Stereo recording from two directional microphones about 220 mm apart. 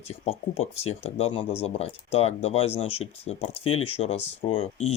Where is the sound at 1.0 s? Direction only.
25° left (ahead or behind).